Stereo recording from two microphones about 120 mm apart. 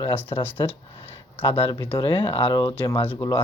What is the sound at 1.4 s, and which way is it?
Speech, 35° left (ahead or behind).